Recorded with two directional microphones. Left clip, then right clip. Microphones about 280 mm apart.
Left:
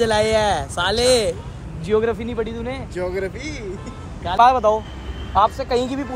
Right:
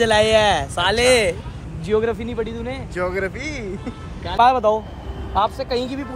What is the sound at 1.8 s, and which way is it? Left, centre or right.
Speech, centre.